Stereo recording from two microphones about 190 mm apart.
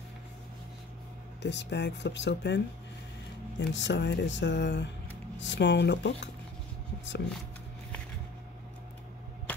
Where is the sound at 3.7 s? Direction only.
70° left (ahead or behind).